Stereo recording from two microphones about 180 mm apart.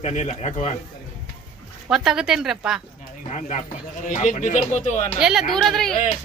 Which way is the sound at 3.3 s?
40° left (ahead or behind).